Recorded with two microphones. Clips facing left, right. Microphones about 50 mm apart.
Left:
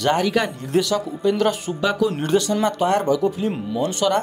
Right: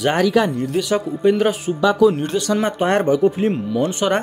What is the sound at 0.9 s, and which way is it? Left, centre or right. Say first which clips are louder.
Speech: right 4 dB; right.